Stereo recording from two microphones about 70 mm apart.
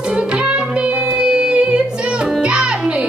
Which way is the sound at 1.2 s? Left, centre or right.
Centre.